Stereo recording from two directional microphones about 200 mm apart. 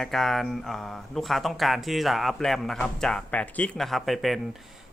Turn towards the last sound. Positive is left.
turn(degrees=0)  # may be behind; listen again after turning